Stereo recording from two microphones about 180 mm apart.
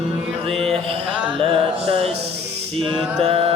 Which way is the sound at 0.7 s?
35° right (ahead or behind).